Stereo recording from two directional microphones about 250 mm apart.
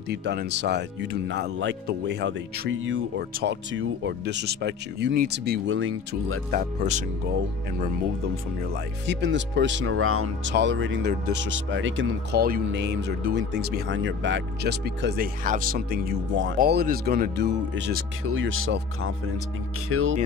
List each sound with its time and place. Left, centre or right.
0.1 s speech: right
6.5 s speech: right
9.0 s speech: right
10.5 s speech: right